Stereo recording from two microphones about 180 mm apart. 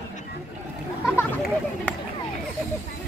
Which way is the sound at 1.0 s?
5° right (ahead or behind).